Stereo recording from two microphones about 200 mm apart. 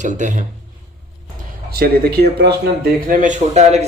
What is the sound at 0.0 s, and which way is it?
Speech, 40° right (ahead or behind).